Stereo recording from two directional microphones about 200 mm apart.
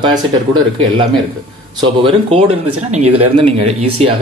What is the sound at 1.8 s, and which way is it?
Speech, 25° right (ahead or behind).